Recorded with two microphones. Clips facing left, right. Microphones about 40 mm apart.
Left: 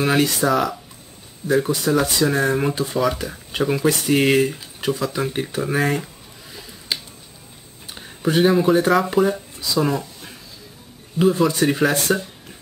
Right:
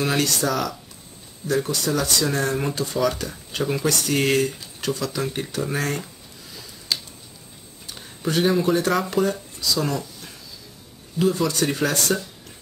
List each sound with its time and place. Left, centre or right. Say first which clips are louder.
0.0 s speech: left 4 dB; centre
6.5 s a sound: even; left
7.8 s speech: left 5 dB; centre